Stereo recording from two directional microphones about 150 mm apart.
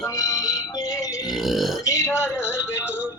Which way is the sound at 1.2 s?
Centre (ahead or behind).